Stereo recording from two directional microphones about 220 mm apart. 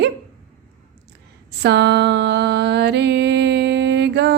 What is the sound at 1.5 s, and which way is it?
Music, 50° right (ahead or behind).